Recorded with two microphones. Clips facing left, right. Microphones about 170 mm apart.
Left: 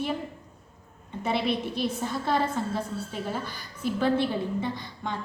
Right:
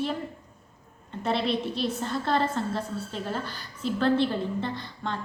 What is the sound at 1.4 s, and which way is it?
Speech, 55° left (ahead or behind).